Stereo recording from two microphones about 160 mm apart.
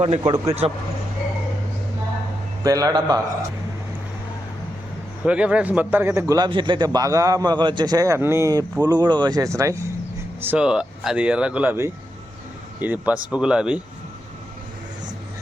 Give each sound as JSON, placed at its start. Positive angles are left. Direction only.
{"t": 0.2, "sound": "a man's voice", "side_deg": -25}
{"t": 2.6, "sound": "a man's voice", "side_deg": -25}
{"t": 5.2, "sound": "a man's voice", "side_deg": -5}
{"t": 10.4, "sound": "speech", "side_deg": -10}